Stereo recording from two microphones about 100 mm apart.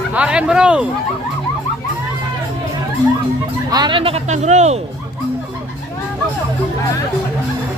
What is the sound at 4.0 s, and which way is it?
Speech, 80° right.